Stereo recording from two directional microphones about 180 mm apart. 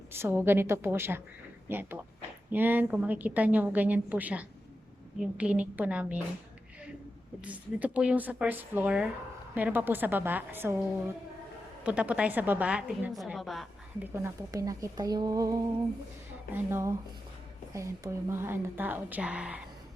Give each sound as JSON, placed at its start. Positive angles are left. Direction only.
{"t": 0.1, "sound": "a woman's voice", "side_deg": -15}
{"t": 7.4, "sound": "a woman's voice", "side_deg": -10}
{"t": 11.8, "sound": "a woman's voice", "side_deg": -5}
{"t": 14.2, "sound": "a woman's voice", "side_deg": -15}